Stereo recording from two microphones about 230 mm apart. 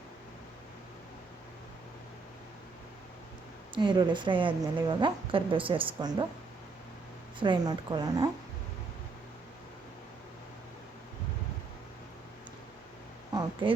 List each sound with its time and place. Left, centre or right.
3.8 s a woman's voice: centre
7.3 s a woman's voice: right
13.3 s a sound: right